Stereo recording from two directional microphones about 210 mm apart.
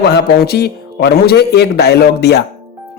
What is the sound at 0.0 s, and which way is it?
Speech, 50° left (ahead or behind).